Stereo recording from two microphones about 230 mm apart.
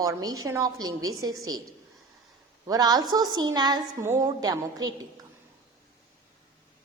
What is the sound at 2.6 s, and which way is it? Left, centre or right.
A woman's voice, centre.